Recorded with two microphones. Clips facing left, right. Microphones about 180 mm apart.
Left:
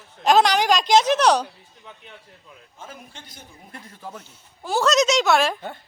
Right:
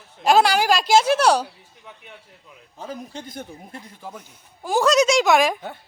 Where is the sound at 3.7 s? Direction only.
15° right (ahead or behind).